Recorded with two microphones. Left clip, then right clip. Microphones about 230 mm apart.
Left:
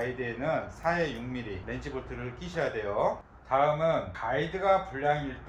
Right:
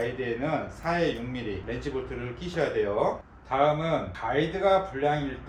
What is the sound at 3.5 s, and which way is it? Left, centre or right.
A man's voice, centre.